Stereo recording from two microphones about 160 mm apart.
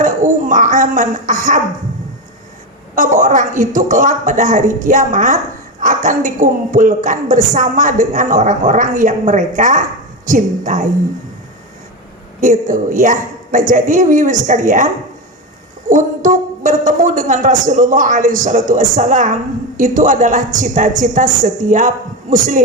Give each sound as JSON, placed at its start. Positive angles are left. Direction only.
{"t": 0.0, "sound": "a sound", "side_deg": -55}
{"t": 2.9, "sound": "a woman's voice", "side_deg": -55}
{"t": 12.4, "sound": "a woman's voice", "side_deg": -55}
{"t": 15.9, "sound": "a woman's voice", "side_deg": -55}